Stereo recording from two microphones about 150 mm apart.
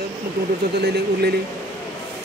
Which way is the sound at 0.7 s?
90° right.